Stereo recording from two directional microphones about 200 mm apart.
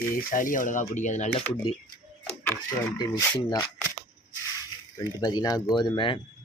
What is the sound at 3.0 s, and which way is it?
Speech, 15° left (ahead or behind).